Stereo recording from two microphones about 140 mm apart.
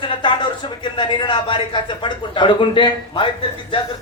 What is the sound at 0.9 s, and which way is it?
Speech, 35° left (ahead or behind).